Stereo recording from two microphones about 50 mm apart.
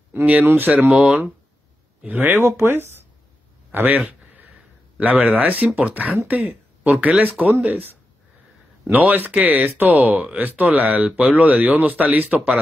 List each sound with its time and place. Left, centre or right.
0.1 s speech: right
2.0 s speech: right
2.3 s speech: right
3.7 s speech: right
8.9 s speech: right